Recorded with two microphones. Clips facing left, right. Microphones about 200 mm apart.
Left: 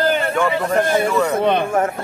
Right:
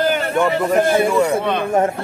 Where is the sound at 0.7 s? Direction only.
10° right (ahead or behind).